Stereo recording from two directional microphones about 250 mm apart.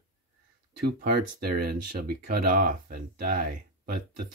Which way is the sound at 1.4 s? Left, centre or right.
Right.